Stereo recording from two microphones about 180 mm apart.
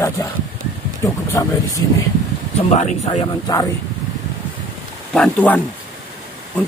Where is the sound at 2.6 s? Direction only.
40° left (ahead or behind).